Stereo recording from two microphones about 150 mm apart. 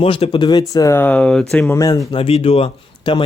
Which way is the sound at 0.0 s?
40° left (ahead or behind).